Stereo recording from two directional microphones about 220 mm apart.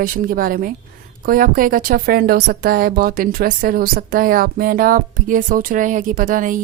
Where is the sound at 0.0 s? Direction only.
40° right (ahead or behind).